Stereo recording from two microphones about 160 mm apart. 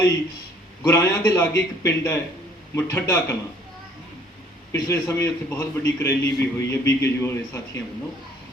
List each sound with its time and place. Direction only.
0.8 s a man's voice: 20° left (ahead or behind)
4.7 s a man's voice: 15° left (ahead or behind)